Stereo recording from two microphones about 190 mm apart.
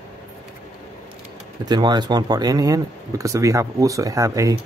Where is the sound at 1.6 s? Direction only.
20° right (ahead or behind).